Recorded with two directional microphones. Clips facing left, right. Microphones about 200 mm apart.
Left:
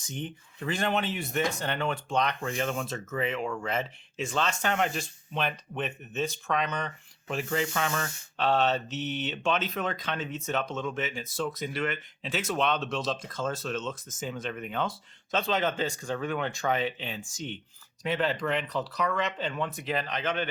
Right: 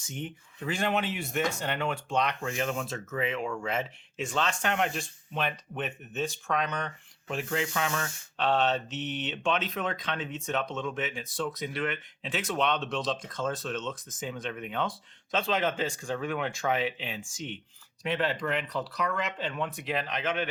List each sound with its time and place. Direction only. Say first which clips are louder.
0.1 s speech: left 1 dB; 5° right (ahead or behind)